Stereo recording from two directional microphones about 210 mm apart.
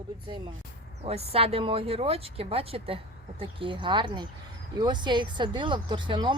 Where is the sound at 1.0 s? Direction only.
30° right (ahead or behind).